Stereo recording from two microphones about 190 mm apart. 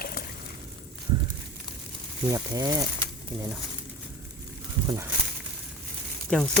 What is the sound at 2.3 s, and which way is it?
Speech, 20° right (ahead or behind).